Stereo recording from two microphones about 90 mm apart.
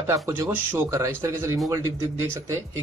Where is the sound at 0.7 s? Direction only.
40° right (ahead or behind).